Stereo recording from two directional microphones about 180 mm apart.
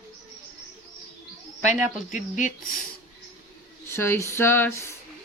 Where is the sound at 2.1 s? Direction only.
45° left (ahead or behind).